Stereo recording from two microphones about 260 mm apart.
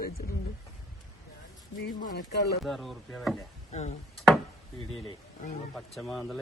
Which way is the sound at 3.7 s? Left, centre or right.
Left.